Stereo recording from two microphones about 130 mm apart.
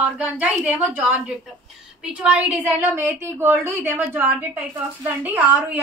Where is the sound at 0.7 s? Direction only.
15° right (ahead or behind).